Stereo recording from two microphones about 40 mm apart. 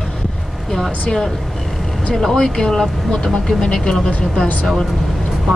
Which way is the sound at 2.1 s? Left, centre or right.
Centre.